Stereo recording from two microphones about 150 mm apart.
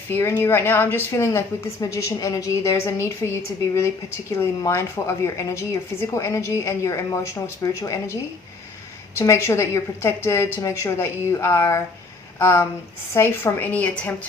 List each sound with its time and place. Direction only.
0.1 s a woman's voice: 15° left (ahead or behind)